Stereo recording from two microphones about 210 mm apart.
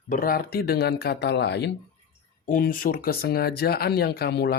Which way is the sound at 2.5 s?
45° left (ahead or behind).